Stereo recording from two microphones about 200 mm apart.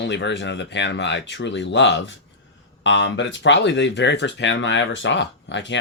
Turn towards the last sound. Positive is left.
turn(degrees=65)  # may be behind; listen again after turning